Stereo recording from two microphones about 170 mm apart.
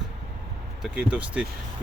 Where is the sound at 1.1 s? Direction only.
5° right (ahead or behind).